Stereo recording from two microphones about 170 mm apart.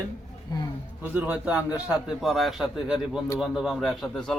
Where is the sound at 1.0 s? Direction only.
10° right (ahead or behind).